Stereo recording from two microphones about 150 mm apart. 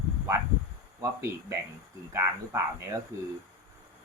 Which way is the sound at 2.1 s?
20° right (ahead or behind).